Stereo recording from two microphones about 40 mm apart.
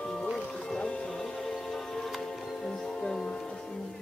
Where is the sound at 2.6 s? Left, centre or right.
Centre.